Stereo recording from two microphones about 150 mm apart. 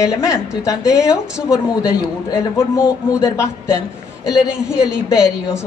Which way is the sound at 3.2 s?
20° left (ahead or behind).